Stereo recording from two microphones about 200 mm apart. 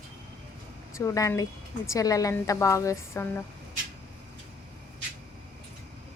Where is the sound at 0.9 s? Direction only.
15° left (ahead or behind).